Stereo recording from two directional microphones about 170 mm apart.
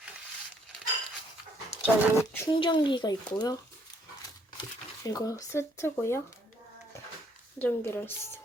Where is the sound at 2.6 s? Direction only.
25° left (ahead or behind).